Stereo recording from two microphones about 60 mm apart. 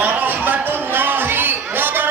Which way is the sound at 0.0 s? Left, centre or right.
Right.